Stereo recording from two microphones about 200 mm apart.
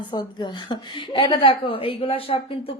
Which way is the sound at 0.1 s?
20° left (ahead or behind).